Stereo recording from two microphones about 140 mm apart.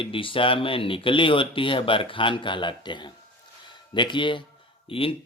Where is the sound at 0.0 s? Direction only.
40° left (ahead or behind).